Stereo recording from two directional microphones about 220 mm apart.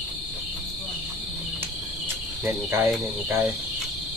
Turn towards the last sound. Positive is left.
turn(degrees=-10)  # may be behind; listen again after turning